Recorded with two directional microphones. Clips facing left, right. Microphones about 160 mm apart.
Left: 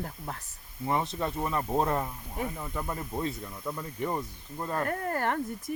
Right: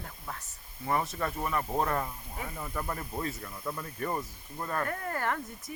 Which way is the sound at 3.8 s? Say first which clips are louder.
Left 3 dB; 15° left (ahead or behind).